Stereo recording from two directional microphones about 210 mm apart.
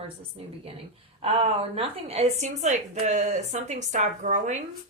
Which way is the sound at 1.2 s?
30° right (ahead or behind).